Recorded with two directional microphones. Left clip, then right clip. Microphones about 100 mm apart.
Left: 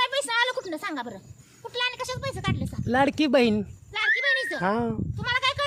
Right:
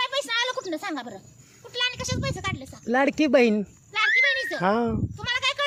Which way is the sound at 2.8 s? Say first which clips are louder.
Right 1 dB; centre (ahead or behind).